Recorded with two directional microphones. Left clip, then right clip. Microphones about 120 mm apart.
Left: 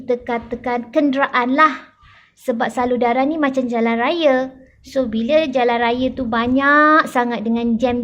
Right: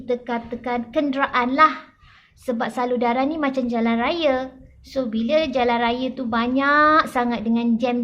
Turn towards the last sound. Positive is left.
turn(degrees=45)  # may be behind; listen again after turning